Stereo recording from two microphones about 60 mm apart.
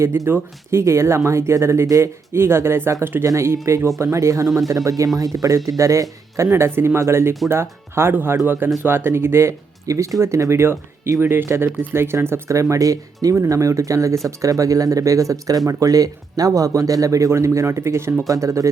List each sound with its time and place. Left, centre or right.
0.3 s speech: right
0.8 s speech: right
2.4 s speech: right
3.2 s speech: right
4.4 s speech: centre
4.9 s speech: right
9.8 s speech: right
10.2 s speech: right
11.4 s speech: right
13.3 s speech: right
18.3 s speech: right